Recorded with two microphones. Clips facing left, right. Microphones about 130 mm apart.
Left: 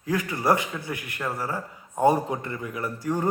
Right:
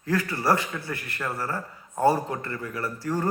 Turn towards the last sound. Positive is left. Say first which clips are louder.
# left 1 dB
turn(degrees=15)  # may be behind; listen again after turning